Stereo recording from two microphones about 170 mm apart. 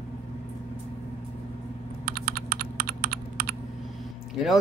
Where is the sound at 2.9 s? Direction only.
65° right (ahead or behind).